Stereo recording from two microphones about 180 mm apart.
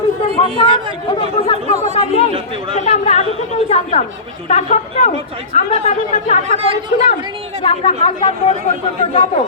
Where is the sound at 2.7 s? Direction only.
40° left (ahead or behind).